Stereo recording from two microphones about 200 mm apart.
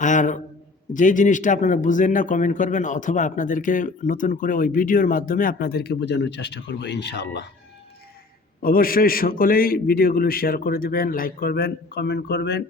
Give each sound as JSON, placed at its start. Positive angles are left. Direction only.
{"t": 0.0, "sound": "a sound", "side_deg": 40}
{"t": 0.9, "sound": "a man's voice", "side_deg": 40}
{"t": 8.6, "sound": "a man's voice", "side_deg": 45}